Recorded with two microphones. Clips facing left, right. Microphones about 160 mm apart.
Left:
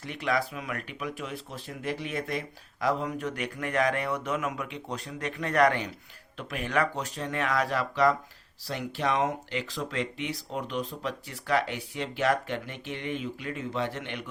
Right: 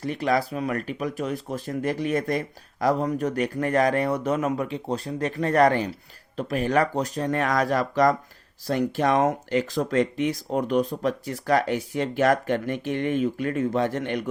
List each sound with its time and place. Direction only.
0.0 s speech: 40° right (ahead or behind)